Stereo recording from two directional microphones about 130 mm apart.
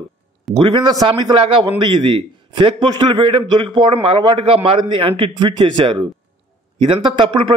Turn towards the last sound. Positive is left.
turn(degrees=-40)  # may be behind; listen again after turning